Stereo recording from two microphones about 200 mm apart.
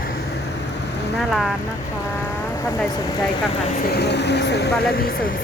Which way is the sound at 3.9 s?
55° left (ahead or behind).